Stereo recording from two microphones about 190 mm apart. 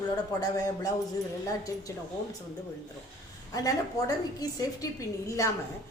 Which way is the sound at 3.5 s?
20° left (ahead or behind).